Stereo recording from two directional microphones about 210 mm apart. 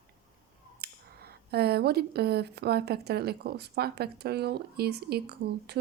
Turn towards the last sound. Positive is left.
turn(degrees=-50)  # may be behind; listen again after turning